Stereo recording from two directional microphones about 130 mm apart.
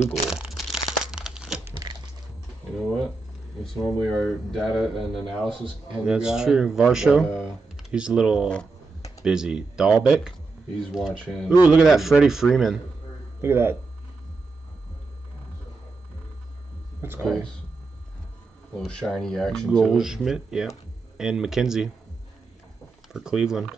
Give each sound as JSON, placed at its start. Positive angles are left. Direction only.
{"t": 0.1, "sound": "crumpling", "side_deg": -5}
{"t": 3.6, "sound": "speech", "side_deg": 0}
{"t": 11.4, "sound": "speech", "side_deg": -10}
{"t": 13.4, "sound": "speech", "side_deg": -20}
{"t": 17.2, "sound": "speech", "side_deg": 5}
{"t": 18.9, "sound": "speech", "side_deg": 5}
{"t": 23.1, "sound": "speech", "side_deg": -5}